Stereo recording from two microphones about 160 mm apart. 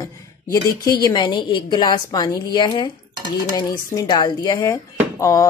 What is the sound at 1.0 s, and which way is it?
A woman's voice, 30° left (ahead or behind).